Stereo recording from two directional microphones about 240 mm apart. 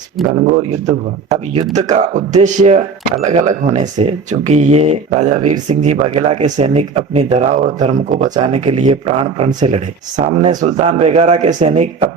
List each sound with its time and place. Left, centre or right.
0.4 s speech: right